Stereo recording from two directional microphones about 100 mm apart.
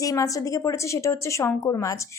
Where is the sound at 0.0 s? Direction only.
35° left (ahead or behind).